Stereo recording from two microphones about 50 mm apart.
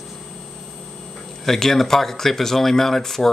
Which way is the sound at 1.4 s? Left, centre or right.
Centre.